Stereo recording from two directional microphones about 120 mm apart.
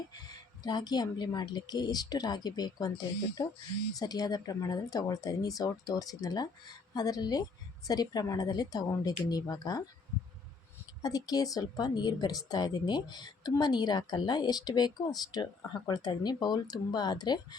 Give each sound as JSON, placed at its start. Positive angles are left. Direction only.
{"t": 0.6, "sound": "a woman's voice", "side_deg": 35}
{"t": 11.0, "sound": "a woman's voice", "side_deg": 30}